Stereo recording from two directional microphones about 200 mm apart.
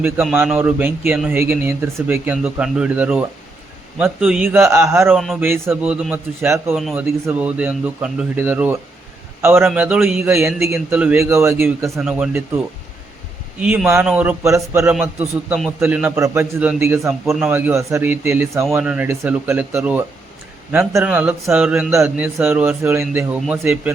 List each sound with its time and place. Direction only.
0.0 s a man's voice: 5° right (ahead or behind)
5.1 s a man's voice: centre (ahead or behind)
6.7 s a man's voice: centre (ahead or behind)
13.6 s a man's voice: 5° right (ahead or behind)
15.4 s a man's voice: centre (ahead or behind)